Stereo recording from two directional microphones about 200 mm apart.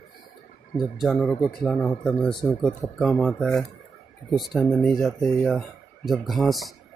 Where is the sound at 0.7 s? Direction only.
Centre (ahead or behind).